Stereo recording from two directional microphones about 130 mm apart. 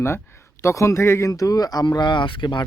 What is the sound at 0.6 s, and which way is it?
Speech, 20° left (ahead or behind).